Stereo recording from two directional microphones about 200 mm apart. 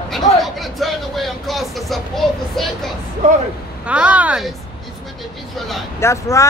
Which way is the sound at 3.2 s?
35° right (ahead or behind).